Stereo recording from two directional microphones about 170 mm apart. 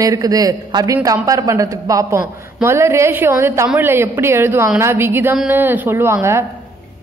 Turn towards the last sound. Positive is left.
turn(degrees=-15)  # may be behind; listen again after turning